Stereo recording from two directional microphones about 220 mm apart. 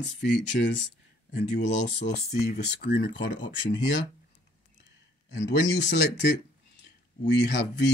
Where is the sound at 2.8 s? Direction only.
50° left (ahead or behind).